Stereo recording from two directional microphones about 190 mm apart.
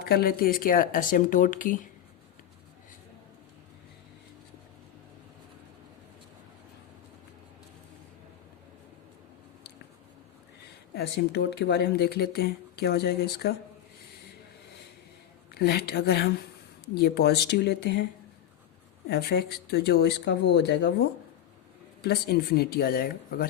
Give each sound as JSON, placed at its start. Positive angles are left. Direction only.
{"t": 0.1, "sound": "speech", "side_deg": 50}
{"t": 10.9, "sound": "speech", "side_deg": 60}
{"t": 15.5, "sound": "speech", "side_deg": 55}
{"t": 19.0, "sound": "speech", "side_deg": 55}
{"t": 22.0, "sound": "speech", "side_deg": 55}